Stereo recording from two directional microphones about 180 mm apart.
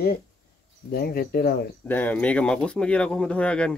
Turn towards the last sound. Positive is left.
turn(degrees=5)  # may be behind; listen again after turning